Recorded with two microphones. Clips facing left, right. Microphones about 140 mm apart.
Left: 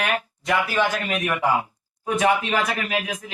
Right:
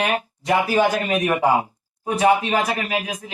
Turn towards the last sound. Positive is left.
turn(degrees=-35)  # may be behind; listen again after turning